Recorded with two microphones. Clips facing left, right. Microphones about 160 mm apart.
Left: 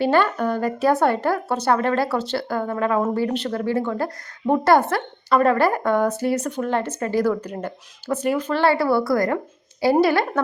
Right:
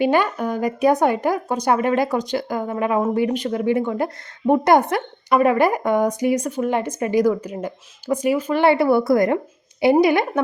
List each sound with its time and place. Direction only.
0.0 s speech: 15° right (ahead or behind)